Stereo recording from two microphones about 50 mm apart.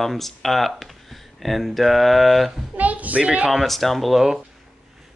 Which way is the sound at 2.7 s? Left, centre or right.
Right.